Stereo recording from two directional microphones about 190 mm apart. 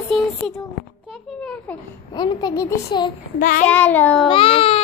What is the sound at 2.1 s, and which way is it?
Speech, 20° left (ahead or behind).